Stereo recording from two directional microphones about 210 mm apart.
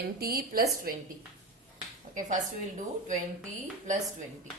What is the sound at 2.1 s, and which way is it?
Speech, 35° right (ahead or behind).